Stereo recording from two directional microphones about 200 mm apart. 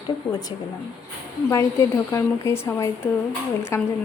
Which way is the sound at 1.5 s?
15° left (ahead or behind).